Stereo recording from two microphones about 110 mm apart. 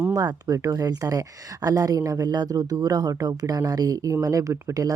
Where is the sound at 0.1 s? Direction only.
35° right (ahead or behind).